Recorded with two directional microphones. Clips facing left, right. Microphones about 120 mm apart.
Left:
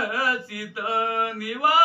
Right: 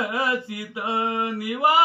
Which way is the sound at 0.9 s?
25° right (ahead or behind).